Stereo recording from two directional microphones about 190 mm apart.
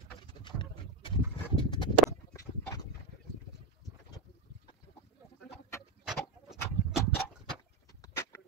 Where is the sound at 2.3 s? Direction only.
15° left (ahead or behind).